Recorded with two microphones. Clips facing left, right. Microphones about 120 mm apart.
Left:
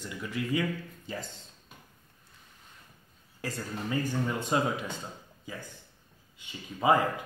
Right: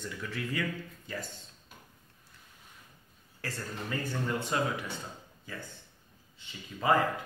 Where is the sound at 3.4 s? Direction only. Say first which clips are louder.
Left 3 dB; 15° left (ahead or behind).